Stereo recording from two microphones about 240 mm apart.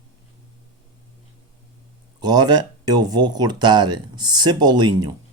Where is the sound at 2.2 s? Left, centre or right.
Centre.